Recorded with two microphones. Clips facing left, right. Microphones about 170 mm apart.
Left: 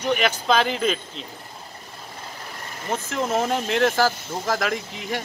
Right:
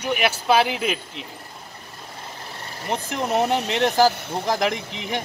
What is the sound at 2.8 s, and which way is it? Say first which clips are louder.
Speech: even; 15° right (ahead or behind).